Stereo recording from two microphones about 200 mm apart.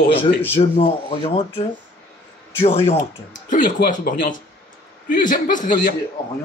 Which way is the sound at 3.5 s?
40° left (ahead or behind).